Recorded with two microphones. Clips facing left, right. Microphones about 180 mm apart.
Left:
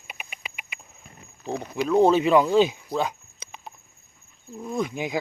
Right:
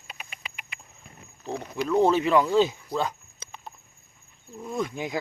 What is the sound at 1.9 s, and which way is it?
Speech, 20° left (ahead or behind).